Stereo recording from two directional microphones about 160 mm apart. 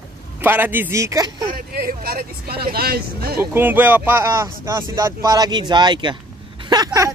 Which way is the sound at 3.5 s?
10° right (ahead or behind).